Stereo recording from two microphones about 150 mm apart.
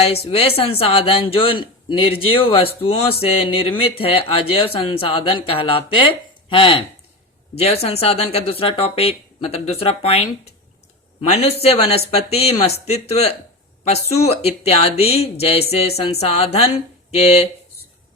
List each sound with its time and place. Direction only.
0.3 s speech: 40° left (ahead or behind)
11.3 s speech: 45° left (ahead or behind)